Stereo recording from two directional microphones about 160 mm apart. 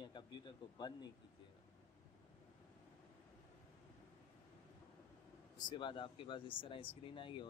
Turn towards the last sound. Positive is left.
turn(degrees=30)  # may be behind; listen again after turning